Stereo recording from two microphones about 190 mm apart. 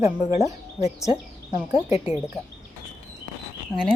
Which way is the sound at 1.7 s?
35° left (ahead or behind).